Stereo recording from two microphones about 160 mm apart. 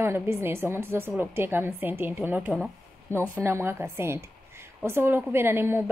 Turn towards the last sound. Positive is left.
turn(degrees=-15)  # may be behind; listen again after turning